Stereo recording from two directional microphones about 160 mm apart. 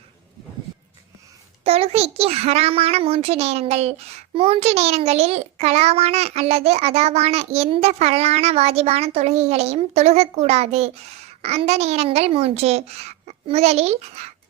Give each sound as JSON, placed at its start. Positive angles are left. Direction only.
{"t": 1.6, "sound": "a child's voice", "side_deg": -40}